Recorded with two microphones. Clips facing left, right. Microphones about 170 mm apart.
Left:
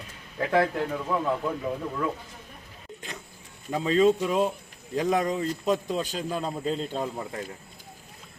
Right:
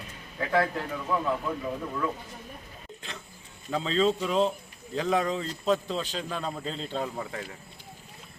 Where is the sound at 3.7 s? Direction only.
10° left (ahead or behind).